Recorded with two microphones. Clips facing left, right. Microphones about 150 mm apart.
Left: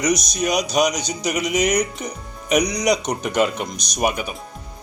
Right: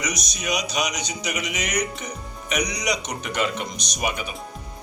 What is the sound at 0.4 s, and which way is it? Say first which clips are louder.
Speech: left 7 dB; 40° left (ahead or behind).